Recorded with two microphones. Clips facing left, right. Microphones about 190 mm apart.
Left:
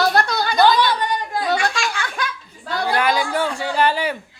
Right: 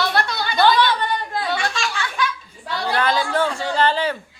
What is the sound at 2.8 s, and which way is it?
Speech, 15° left (ahead or behind).